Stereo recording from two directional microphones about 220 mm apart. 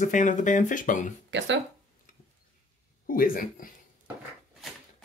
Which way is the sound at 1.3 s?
55° right (ahead or behind).